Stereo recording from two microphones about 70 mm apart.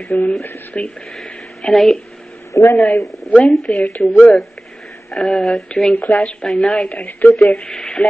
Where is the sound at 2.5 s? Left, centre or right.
Left.